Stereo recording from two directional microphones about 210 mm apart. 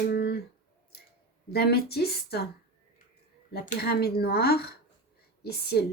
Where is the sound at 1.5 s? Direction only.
50° left (ahead or behind).